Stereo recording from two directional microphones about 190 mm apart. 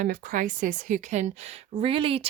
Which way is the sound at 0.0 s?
45° right (ahead or behind).